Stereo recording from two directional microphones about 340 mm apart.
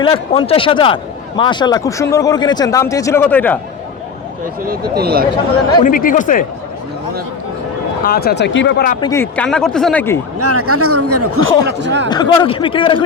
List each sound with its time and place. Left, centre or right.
0.0 s speech: centre
4.6 s speech: right
5.8 s speech: left
8.0 s speech: left
9.0 s speech: centre
10.4 s speech: right
12.0 s speech: centre